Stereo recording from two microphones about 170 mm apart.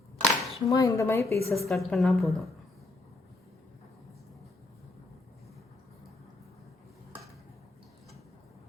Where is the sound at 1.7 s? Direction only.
Centre (ahead or behind).